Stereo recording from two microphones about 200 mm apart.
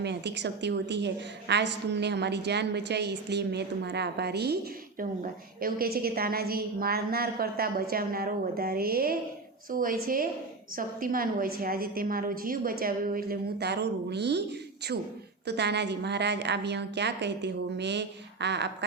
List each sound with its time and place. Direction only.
0.0 s a woman's voice: 60° right (ahead or behind)
15.4 s a woman's voice: 55° right (ahead or behind)